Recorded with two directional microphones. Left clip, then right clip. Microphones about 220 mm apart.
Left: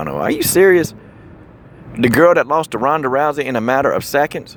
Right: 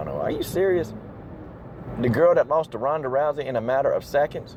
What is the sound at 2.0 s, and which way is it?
Speech, 40° left (ahead or behind).